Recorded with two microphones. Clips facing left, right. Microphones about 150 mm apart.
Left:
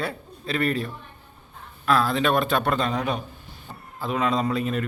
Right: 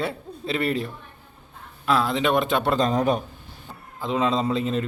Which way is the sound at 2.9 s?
40° right (ahead or behind).